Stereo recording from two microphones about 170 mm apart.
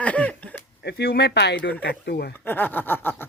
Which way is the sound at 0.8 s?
75° left (ahead or behind).